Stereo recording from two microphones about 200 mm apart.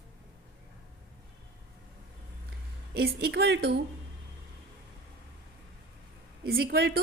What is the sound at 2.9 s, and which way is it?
Speech, 50° right (ahead or behind).